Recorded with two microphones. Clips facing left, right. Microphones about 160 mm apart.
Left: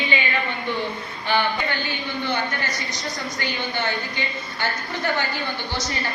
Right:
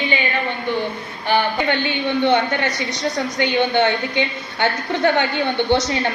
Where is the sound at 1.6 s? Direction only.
70° right (ahead or behind).